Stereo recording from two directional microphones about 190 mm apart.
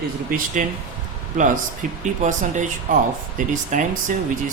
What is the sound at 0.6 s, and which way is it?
Speech, 40° right (ahead or behind).